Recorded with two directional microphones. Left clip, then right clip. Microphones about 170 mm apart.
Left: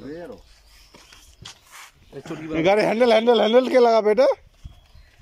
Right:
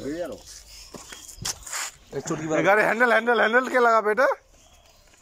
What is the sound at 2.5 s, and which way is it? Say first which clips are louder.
Speech: left 1 dB; 30° left (ahead or behind).